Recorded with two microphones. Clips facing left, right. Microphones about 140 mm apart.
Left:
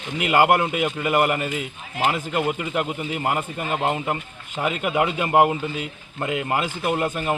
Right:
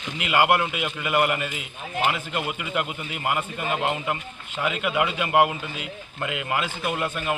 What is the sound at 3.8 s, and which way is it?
Speech, 35° left (ahead or behind).